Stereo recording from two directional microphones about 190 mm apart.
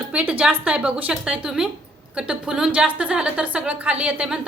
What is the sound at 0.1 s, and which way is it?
A woman's voice, 10° right (ahead or behind).